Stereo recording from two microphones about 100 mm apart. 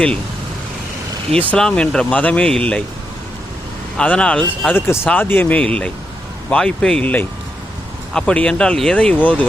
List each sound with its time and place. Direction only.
1.4 s speech: 10° left (ahead or behind)
3.9 s speech: 10° left (ahead or behind)